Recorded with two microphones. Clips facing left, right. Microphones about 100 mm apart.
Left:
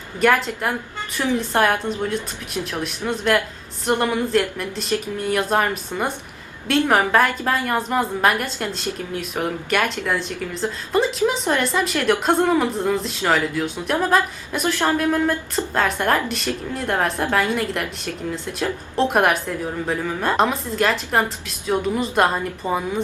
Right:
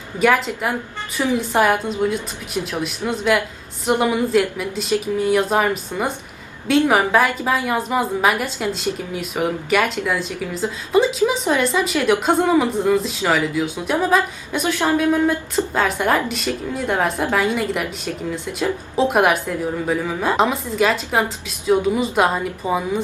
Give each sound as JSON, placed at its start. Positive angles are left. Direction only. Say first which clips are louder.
{"t": 0.2, "sound": "a woman's voice", "louder": "right 1 dB", "side_deg": -5}